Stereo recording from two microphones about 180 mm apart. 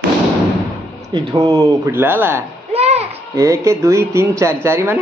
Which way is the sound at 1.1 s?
25° right (ahead or behind).